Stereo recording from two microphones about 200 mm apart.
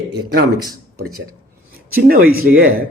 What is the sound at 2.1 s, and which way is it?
Speech, 45° right (ahead or behind).